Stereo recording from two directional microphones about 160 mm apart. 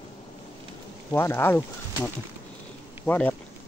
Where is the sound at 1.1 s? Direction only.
15° left (ahead or behind).